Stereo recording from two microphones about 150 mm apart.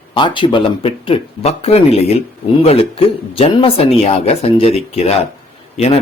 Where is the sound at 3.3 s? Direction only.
40° left (ahead or behind).